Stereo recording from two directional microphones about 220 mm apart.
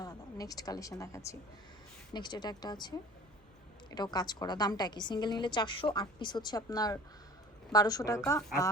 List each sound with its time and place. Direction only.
0.0 s a woman's voice: 15° left (ahead or behind)